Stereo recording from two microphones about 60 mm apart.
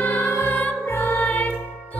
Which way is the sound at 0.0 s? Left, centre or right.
Left.